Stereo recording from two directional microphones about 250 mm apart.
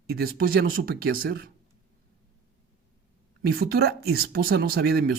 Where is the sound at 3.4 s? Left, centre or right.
Right.